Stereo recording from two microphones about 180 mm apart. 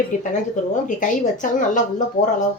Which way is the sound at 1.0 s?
45° left (ahead or behind).